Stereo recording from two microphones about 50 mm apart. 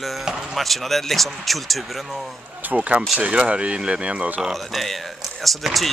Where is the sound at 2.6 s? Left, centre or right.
Right.